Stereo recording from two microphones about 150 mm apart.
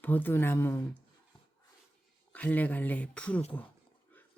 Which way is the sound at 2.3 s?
10° left (ahead or behind).